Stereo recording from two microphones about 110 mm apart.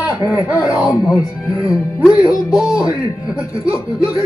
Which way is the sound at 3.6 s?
30° left (ahead or behind).